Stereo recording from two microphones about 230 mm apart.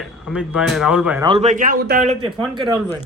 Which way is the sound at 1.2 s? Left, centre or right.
Right.